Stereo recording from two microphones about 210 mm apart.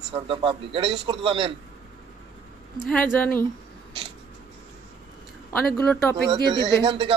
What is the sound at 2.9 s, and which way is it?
Speech, 5° left (ahead or behind).